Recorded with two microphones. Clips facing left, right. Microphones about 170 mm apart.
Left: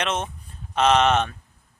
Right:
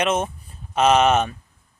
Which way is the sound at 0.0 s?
10° right (ahead or behind).